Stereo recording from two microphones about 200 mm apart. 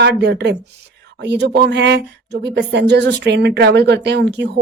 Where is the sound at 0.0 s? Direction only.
55° right (ahead or behind).